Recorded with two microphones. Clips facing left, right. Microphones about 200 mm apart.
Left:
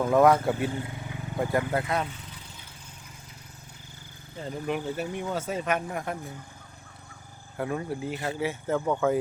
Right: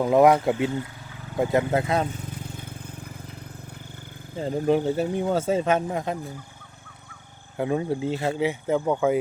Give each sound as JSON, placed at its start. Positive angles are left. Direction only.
{"t": 0.0, "sound": "speech", "side_deg": -15}
{"t": 2.2, "sound": "vehicle", "side_deg": -50}
{"t": 4.4, "sound": "speech", "side_deg": -35}
{"t": 7.5, "sound": "speech", "side_deg": -20}